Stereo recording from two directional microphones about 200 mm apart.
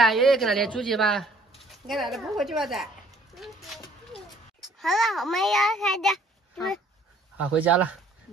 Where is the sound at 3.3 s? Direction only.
Centre (ahead or behind).